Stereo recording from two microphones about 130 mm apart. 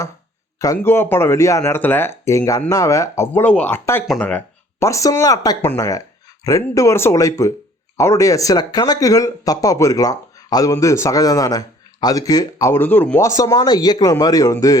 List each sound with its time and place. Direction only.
0.8 s speech: 15° left (ahead or behind)
4.8 s speech: 25° left (ahead or behind)